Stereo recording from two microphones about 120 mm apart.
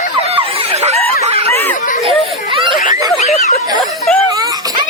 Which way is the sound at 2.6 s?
40° right (ahead or behind).